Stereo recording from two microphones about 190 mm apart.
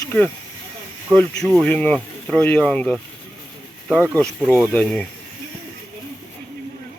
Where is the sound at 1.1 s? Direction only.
5° left (ahead or behind).